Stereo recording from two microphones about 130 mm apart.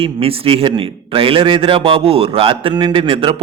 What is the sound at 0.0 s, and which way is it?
A man's voice, 45° right (ahead or behind).